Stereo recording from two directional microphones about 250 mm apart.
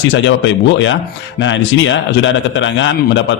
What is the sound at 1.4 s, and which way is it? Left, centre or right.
A man's voice, left.